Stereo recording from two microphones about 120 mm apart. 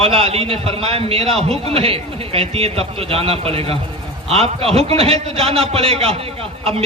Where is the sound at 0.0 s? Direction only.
55° right (ahead or behind).